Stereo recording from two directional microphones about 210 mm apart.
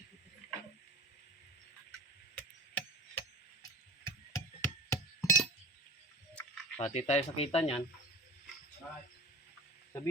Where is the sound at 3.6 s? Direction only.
15° left (ahead or behind).